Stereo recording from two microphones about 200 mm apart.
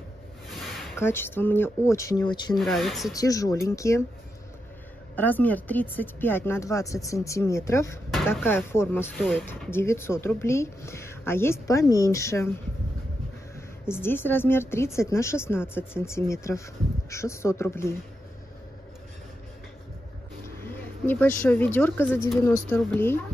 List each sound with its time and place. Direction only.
0.5 s a sound: centre (ahead or behind)
0.9 s speech: 10° left (ahead or behind)
2.5 s speech: centre (ahead or behind)
3.2 s speech: 15° left (ahead or behind)
5.1 s speech: 10° left (ahead or behind)
13.8 s speech: 10° left (ahead or behind)
20.4 s speech: 10° left (ahead or behind)